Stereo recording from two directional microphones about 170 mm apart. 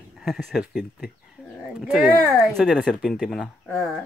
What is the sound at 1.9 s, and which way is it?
Speech, 5° right (ahead or behind).